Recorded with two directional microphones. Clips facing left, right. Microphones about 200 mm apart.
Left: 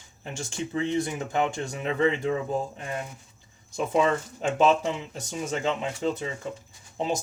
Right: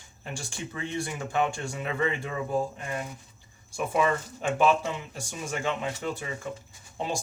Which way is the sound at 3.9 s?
25° left (ahead or behind).